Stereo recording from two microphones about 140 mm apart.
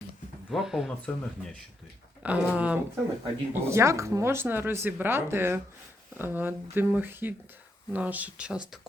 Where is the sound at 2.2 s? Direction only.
10° right (ahead or behind).